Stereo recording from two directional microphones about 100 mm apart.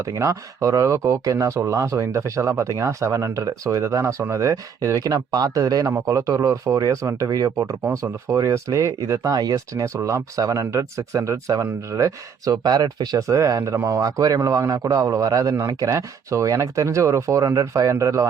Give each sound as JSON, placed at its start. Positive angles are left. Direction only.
{"t": 0.0, "sound": "speech", "side_deg": -30}